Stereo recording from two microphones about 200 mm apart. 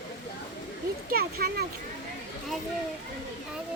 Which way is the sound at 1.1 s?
50° right (ahead or behind).